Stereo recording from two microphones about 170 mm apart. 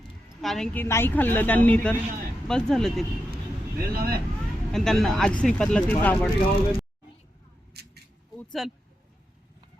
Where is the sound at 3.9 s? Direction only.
60° right (ahead or behind).